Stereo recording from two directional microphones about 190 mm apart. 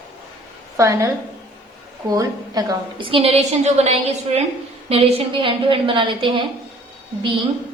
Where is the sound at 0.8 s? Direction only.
15° right (ahead or behind).